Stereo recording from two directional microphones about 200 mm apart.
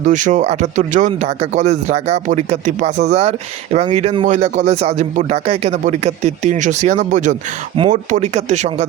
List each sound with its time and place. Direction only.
0.0 s speech: 40° right (ahead or behind)